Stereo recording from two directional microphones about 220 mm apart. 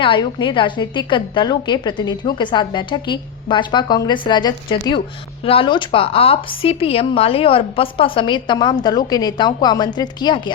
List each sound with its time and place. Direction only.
0.0 s a woman's voice: 20° left (ahead or behind)